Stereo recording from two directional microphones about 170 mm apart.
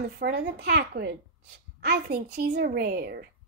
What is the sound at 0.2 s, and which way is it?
Speech, 85° right.